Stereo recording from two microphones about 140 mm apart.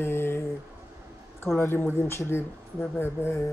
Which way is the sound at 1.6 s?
15° left (ahead or behind).